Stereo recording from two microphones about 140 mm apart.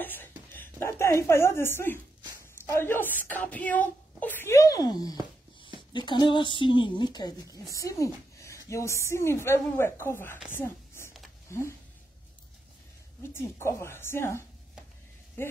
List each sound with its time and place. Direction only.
0.0 s a sound: 15° left (ahead or behind)
0.5 s a woman's voice: 15° left (ahead or behind)
10.5 s whispering: 15° left (ahead or behind)
13.2 s a woman's voice: 20° left (ahead or behind)